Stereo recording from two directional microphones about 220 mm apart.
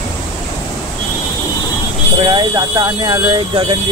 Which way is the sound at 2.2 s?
15° right (ahead or behind).